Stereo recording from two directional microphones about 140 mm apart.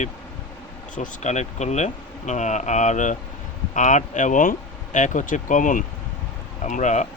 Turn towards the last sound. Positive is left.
turn(degrees=60)  # may be behind; listen again after turning